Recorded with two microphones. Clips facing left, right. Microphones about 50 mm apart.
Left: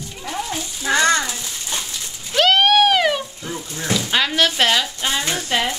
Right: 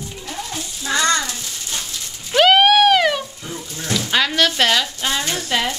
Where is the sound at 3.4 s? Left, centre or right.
Left.